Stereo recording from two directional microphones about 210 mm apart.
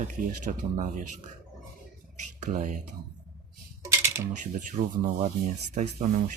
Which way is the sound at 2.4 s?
35° right (ahead or behind).